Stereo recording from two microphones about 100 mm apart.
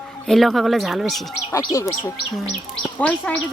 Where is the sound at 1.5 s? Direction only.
30° left (ahead or behind).